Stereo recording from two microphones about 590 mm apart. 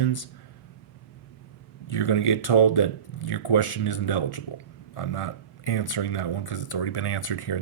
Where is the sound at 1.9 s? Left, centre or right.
Left.